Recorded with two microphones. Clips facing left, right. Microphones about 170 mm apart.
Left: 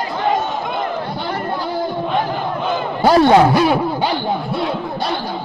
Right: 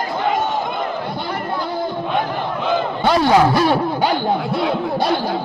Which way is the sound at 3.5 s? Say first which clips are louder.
Left 1 dB; 15° left (ahead or behind).